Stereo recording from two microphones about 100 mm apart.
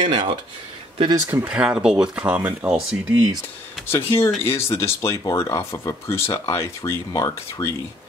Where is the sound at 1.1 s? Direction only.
35° right (ahead or behind).